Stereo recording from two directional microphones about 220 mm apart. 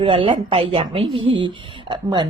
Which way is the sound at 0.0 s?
25° right (ahead or behind).